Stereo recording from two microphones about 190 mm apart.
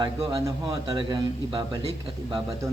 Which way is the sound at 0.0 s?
25° right (ahead or behind).